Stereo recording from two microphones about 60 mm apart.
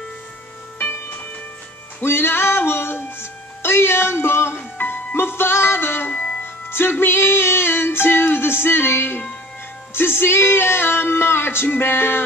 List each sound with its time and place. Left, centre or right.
0.7 s music: left
6.1 s music: left
6.4 s music: left